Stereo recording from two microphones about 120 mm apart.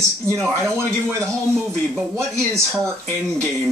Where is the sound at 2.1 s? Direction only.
25° right (ahead or behind).